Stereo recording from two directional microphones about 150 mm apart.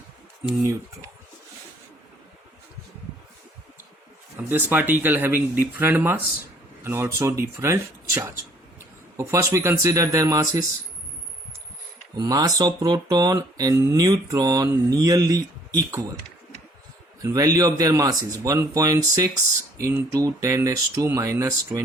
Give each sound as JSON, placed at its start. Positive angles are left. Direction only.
{"t": 4.4, "sound": "speech", "side_deg": -15}
{"t": 12.1, "sound": "speech", "side_deg": -25}
{"t": 17.2, "sound": "speech", "side_deg": -20}